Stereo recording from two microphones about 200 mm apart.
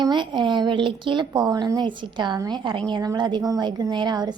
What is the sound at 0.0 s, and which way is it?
A woman's voice, 20° right (ahead or behind).